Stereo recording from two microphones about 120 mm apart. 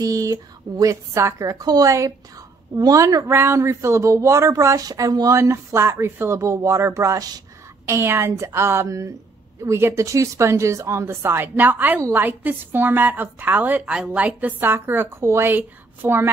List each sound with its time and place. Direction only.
0.0 s a woman's voice: 30° right (ahead or behind)
7.8 s a woman's voice: 20° right (ahead or behind)